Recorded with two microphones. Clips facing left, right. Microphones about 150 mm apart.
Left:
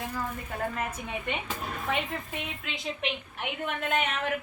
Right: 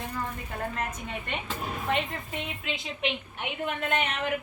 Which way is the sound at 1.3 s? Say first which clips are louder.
Right 1 dB; 5° left (ahead or behind).